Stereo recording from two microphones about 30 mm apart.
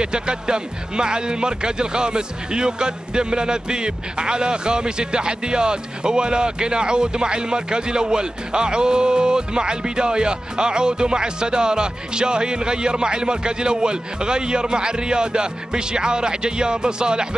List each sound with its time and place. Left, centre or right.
0.0 s speech: right